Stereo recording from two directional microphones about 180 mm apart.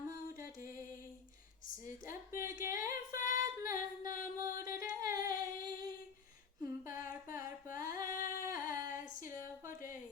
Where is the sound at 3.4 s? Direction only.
15° right (ahead or behind).